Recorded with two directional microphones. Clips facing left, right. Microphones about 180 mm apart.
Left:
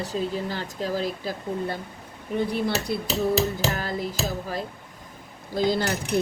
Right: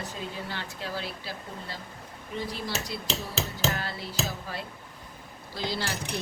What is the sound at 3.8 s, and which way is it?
Music, 45° left (ahead or behind).